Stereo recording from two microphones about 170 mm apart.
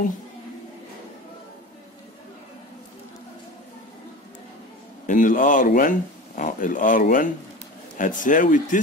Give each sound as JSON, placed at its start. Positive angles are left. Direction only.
{"t": 5.0, "sound": "speech", "side_deg": 50}